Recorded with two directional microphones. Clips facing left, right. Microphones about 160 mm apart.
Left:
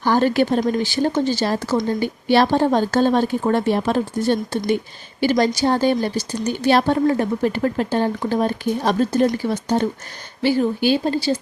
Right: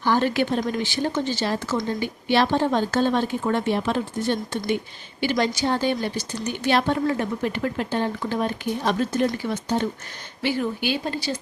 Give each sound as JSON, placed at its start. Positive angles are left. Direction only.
{"t": 0.0, "sound": "speech", "side_deg": 40}